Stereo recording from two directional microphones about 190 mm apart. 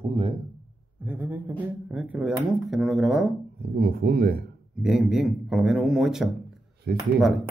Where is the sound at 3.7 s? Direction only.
50° right (ahead or behind).